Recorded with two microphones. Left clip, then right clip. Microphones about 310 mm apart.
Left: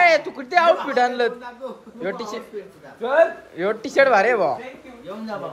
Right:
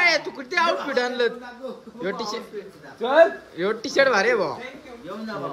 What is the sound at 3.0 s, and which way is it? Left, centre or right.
Speech, right.